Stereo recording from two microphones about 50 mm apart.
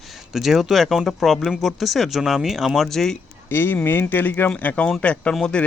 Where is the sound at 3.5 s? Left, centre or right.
Left.